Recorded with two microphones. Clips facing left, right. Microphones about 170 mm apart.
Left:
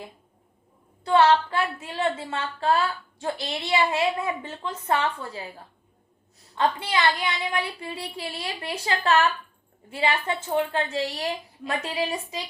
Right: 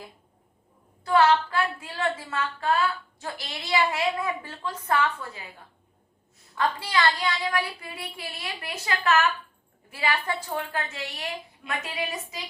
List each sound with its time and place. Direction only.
1.0 s a woman's voice: 30° left (ahead or behind)
6.6 s a woman's voice: 25° left (ahead or behind)